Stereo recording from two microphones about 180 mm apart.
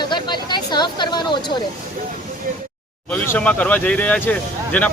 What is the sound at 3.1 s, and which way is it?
Speech, 5° left (ahead or behind).